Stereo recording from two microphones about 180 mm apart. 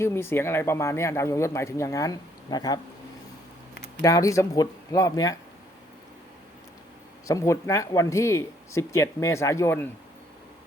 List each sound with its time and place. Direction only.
0.0 s speech: 15° left (ahead or behind)
4.0 s speech: 20° left (ahead or behind)
7.3 s speech: 15° left (ahead or behind)